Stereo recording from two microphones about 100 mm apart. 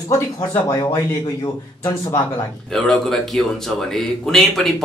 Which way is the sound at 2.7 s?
5° left (ahead or behind).